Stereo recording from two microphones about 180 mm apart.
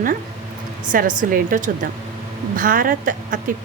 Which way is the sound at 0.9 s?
45° right (ahead or behind).